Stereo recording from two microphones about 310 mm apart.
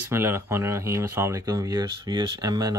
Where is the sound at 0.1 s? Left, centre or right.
Centre.